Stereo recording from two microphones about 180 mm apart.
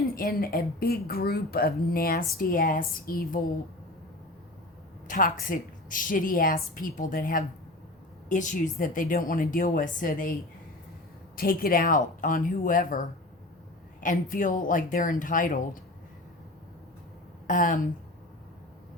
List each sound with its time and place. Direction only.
0.2 s a woman's voice: 55° left (ahead or behind)
5.0 s a woman's voice: 50° left (ahead or behind)
11.3 s a woman's voice: 55° left (ahead or behind)
14.0 s a woman's voice: 50° left (ahead or behind)
17.4 s speech: 50° left (ahead or behind)